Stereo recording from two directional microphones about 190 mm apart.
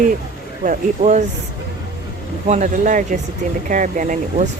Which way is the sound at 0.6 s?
40° right (ahead or behind).